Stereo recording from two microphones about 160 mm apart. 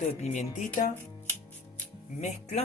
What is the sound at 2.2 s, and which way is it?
Speech, 45° left (ahead or behind).